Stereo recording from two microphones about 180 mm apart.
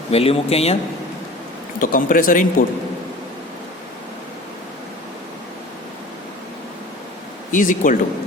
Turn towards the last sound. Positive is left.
turn(degrees=45)  # may be behind; listen again after turning